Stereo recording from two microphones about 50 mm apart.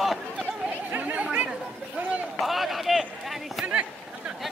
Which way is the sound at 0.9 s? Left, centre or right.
Right.